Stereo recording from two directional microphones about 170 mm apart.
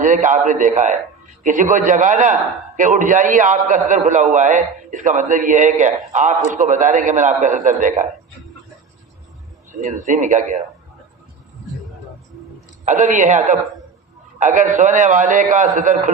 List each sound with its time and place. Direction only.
0.0 s a man's voice: 50° right (ahead or behind)
9.7 s a man's voice: 45° right (ahead or behind)
12.9 s a man's voice: 50° right (ahead or behind)